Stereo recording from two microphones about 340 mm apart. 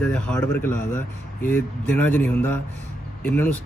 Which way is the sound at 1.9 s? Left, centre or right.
Centre.